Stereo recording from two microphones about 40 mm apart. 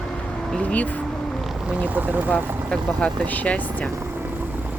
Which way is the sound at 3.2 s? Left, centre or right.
Left.